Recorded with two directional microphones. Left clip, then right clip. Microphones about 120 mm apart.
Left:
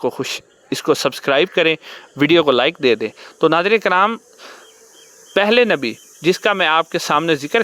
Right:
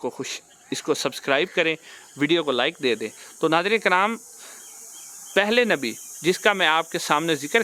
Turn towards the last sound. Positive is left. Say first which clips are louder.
# left 5 dB
turn(degrees=50)  # may be behind; listen again after turning